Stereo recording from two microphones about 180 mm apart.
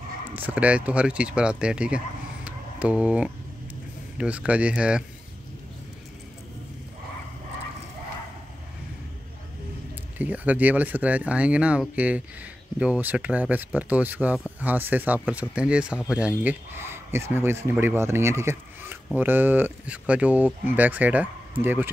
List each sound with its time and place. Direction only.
0.3 s speech: 10° right (ahead or behind)
2.4 s a sound: 5° right (ahead or behind)
4.2 s speech: 5° right (ahead or behind)
10.1 s speech: 10° right (ahead or behind)